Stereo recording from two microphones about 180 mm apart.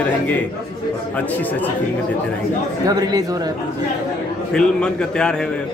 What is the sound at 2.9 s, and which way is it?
Speech, 20° right (ahead or behind).